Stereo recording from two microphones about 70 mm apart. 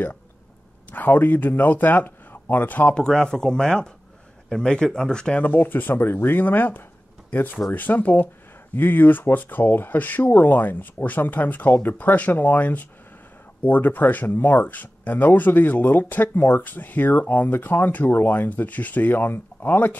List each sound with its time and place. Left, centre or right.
0.9 s speech: left
3.0 s speech: centre
5.4 s speech: left